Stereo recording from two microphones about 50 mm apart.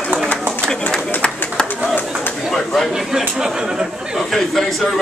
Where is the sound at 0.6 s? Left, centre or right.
Centre.